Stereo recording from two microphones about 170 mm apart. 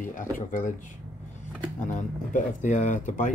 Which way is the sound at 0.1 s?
50° left (ahead or behind).